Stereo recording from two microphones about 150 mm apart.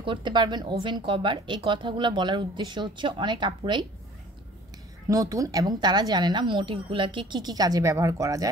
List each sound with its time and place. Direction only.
0.0 s speech: 35° right (ahead or behind)
5.0 s speech: 20° right (ahead or behind)